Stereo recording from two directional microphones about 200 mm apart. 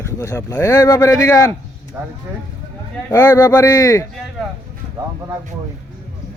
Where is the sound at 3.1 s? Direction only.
20° left (ahead or behind).